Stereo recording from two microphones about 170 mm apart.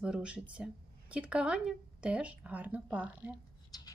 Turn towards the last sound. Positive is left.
turn(degrees=25)  # may be behind; listen again after turning